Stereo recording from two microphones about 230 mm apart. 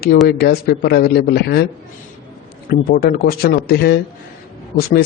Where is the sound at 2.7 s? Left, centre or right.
Left.